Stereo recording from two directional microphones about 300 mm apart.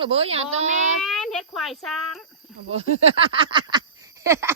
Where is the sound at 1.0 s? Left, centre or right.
Centre.